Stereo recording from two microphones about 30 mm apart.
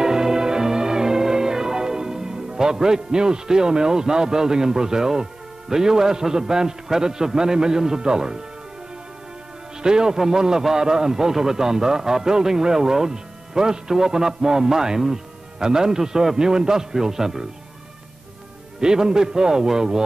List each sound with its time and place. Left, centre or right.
0.0 s music: centre
6.4 s a man's voice: centre
9.8 s a man's voice: right
18.8 s a man's voice: right